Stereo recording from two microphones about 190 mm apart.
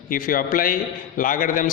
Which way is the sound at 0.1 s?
45° left (ahead or behind).